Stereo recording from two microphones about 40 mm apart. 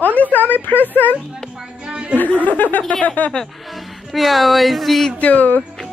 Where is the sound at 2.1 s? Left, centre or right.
Left.